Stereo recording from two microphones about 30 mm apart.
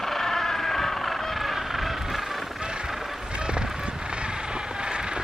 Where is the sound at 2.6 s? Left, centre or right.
Right.